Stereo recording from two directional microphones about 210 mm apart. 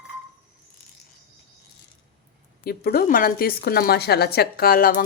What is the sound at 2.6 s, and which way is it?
A woman's voice, 45° left (ahead or behind).